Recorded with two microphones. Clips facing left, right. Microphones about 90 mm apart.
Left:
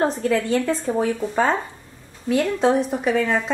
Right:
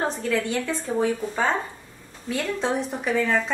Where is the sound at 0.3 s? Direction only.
35° left (ahead or behind).